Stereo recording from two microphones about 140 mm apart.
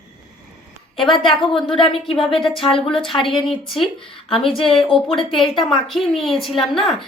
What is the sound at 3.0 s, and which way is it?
Speech, centre (ahead or behind).